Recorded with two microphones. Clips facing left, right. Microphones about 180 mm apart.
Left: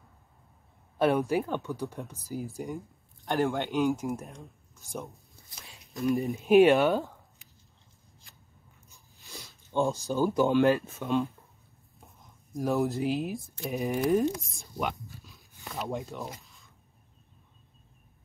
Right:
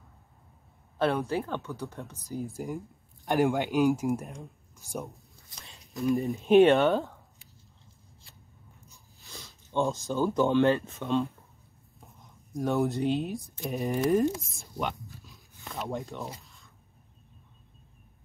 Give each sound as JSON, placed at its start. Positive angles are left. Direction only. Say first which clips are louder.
{"t": 0.9, "sound": "speech", "louder": "left 2 dB", "side_deg": 15}
{"t": 2.2, "sound": "speech", "louder": "right 1 dB", "side_deg": 5}
{"t": 9.2, "sound": "a sound", "louder": "left 1 dB", "side_deg": 15}
{"t": 10.0, "sound": "speech", "louder": "even", "side_deg": 15}
{"t": 11.0, "sound": "speech", "louder": "even", "side_deg": 0}
{"t": 12.5, "sound": "speech", "louder": "even", "side_deg": 0}
{"t": 14.4, "sound": "a sound", "louder": "even", "side_deg": 0}
{"t": 15.6, "sound": "speech", "louder": "even", "side_deg": 0}